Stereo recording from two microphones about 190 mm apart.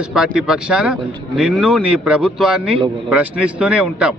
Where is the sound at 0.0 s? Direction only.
5° right (ahead or behind).